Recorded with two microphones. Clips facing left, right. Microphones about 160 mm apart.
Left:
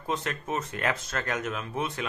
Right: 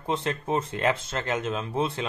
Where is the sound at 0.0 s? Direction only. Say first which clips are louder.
Right 3 dB; 25° right (ahead or behind).